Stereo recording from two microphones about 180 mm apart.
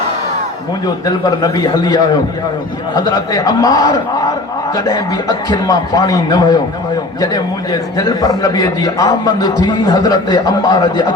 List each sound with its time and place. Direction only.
1.0 s a man's voice: 20° left (ahead or behind)